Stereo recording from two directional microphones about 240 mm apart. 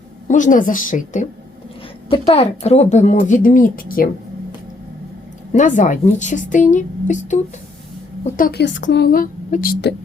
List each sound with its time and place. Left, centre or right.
0.3 s a woman's voice: left
5.5 s a woman's voice: left